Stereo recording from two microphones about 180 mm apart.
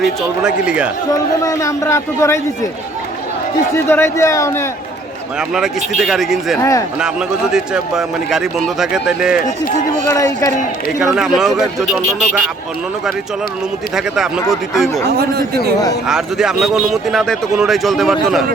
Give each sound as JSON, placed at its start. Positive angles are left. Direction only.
{"t": 0.0, "sound": "a man's voice", "side_deg": 0}
{"t": 1.1, "sound": "speech", "side_deg": 20}
{"t": 3.8, "sound": "speech", "side_deg": 15}
{"t": 5.4, "sound": "a man's voice", "side_deg": 0}
{"t": 6.6, "sound": "speech", "side_deg": 20}
{"t": 7.0, "sound": "a man's voice", "side_deg": -5}
{"t": 10.1, "sound": "speech", "side_deg": 15}
{"t": 11.0, "sound": "a man's voice", "side_deg": -5}
{"t": 13.9, "sound": "a man's voice", "side_deg": -5}
{"t": 15.0, "sound": "a man's voice", "side_deg": -65}
{"t": 16.0, "sound": "a man's voice", "side_deg": -5}